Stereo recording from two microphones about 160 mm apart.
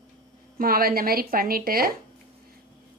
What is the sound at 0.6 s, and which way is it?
A woman's voice, 65° right (ahead or behind).